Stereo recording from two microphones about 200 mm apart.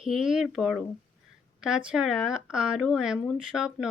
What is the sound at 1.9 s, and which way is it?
Speech, 5° right (ahead or behind).